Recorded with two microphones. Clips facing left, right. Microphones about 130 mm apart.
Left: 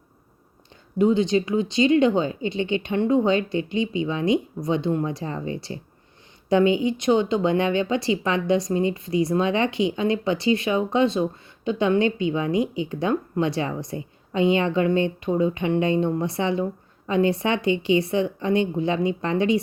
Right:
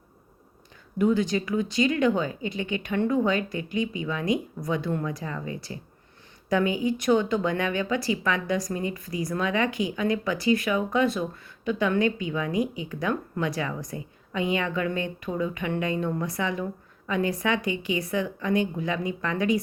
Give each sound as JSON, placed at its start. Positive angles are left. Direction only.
{"t": 0.9, "sound": "speech", "side_deg": 25}